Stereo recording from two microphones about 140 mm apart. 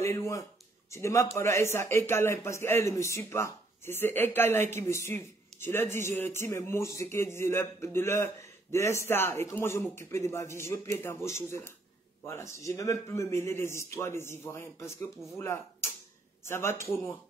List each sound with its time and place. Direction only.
0.0 s a man's voice: 20° left (ahead or behind)